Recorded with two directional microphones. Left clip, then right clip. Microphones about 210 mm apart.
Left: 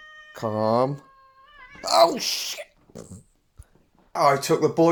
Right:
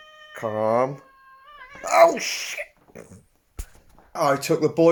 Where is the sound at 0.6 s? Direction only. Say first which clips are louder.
Right 1 dB; 30° left (ahead or behind).